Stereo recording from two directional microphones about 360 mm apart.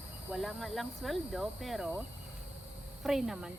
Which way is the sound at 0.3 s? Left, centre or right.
Centre.